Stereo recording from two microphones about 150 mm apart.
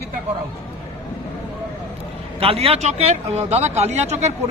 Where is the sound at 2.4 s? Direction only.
40° right (ahead or behind).